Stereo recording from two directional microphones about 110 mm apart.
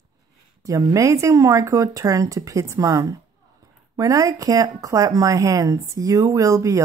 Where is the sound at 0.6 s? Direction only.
30° right (ahead or behind).